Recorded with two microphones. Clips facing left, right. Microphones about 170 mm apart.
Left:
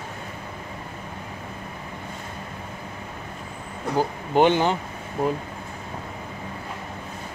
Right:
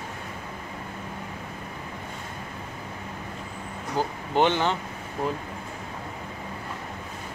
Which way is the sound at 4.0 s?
10° left (ahead or behind).